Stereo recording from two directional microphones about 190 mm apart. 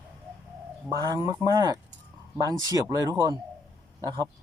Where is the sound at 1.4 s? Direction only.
20° right (ahead or behind).